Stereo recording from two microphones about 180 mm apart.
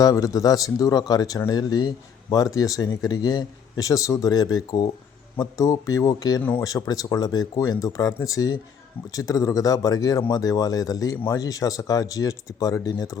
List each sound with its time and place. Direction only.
0.0 s speech: 20° left (ahead or behind)